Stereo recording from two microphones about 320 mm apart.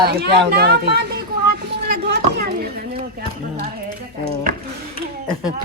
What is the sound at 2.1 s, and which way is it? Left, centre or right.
Speech, right.